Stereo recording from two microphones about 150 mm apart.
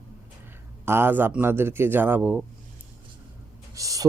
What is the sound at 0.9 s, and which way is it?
Speech, 15° right (ahead or behind).